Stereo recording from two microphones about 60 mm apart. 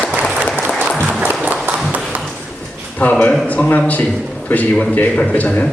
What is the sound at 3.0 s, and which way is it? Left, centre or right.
A man's voice, left.